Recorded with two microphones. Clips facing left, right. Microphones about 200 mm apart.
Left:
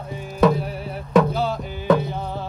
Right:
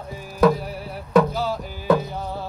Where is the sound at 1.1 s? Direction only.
10° right (ahead or behind).